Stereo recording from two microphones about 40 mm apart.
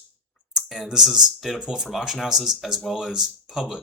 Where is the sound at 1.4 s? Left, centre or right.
Centre.